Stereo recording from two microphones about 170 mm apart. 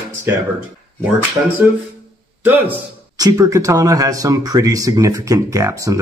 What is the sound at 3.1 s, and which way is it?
Speech, 20° right (ahead or behind).